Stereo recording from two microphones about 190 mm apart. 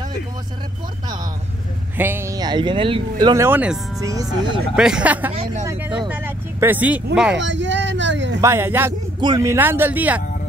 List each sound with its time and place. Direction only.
2.0 s speech: 10° right (ahead or behind)
4.0 s speech: 20° right (ahead or behind)
4.7 s speech: 5° right (ahead or behind)
5.3 s speech: 30° right (ahead or behind)
6.0 s speech: 10° right (ahead or behind)
7.3 s a sound: 75° right (ahead or behind)
8.4 s speech: 15° right (ahead or behind)